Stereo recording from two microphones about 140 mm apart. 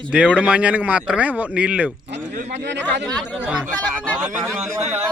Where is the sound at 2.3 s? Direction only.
55° right (ahead or behind).